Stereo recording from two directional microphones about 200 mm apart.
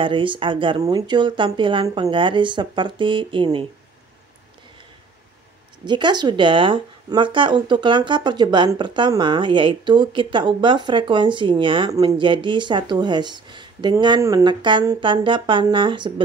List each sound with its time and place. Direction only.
0.0 s speech: 25° right (ahead or behind)
5.9 s speech: 20° right (ahead or behind)